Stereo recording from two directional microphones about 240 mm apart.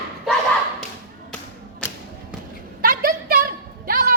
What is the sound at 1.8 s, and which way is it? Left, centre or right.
Thump, centre.